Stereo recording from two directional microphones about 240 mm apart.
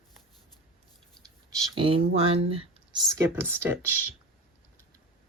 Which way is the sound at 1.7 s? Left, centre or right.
Right.